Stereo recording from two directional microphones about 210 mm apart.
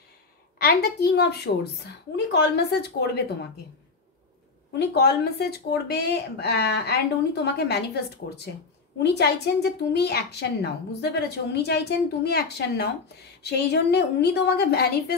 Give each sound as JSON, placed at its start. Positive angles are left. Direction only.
{"t": 0.6, "sound": "a child's voice", "side_deg": 45}
{"t": 4.7, "sound": "a child's voice", "side_deg": 50}